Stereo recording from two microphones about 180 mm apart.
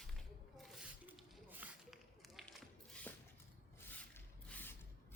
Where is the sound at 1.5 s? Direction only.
5° right (ahead or behind).